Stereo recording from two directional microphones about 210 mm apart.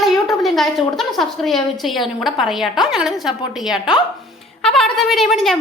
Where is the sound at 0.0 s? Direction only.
Centre (ahead or behind).